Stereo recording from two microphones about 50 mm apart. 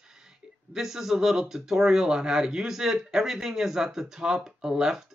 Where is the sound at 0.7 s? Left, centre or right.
Centre.